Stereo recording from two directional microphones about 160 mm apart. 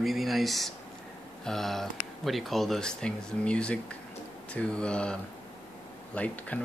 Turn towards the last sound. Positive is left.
turn(degrees=10)  # may be behind; listen again after turning